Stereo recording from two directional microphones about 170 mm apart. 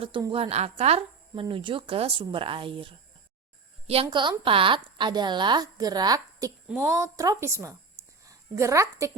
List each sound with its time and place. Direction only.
0.2 s a woman's voice: 30° right (ahead or behind)